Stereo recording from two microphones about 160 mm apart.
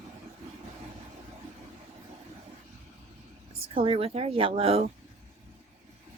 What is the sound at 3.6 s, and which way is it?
A woman's voice, 35° right (ahead or behind).